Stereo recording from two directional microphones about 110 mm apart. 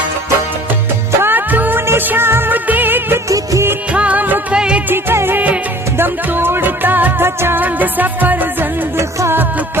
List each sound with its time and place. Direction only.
1.2 s music: 20° right (ahead or behind)
3.2 s music of bollywood: 30° right (ahead or behind)
3.7 s music: 10° right (ahead or behind)